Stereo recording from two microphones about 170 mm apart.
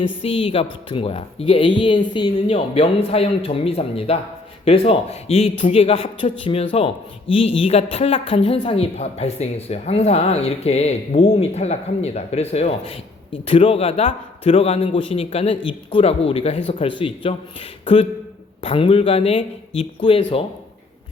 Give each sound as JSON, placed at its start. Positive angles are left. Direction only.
{"t": 0.0, "sound": "a man's voice", "side_deg": 35}
{"t": 18.6, "sound": "a man's voice", "side_deg": 35}